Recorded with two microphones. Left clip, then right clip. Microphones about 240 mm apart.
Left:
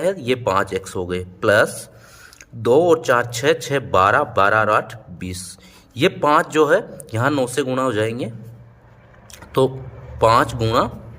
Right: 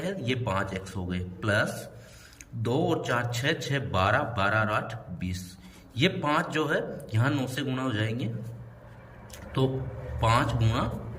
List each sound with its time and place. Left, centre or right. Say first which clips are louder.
0.0 s a man's voice: left 12 dB; left
10.2 s a man's voice: left 11 dB; left